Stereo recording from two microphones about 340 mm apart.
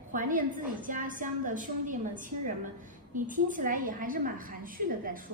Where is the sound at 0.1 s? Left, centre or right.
Right.